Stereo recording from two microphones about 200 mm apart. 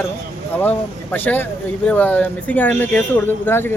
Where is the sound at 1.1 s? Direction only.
10° left (ahead or behind).